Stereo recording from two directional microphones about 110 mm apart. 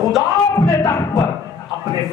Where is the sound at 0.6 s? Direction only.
25° left (ahead or behind).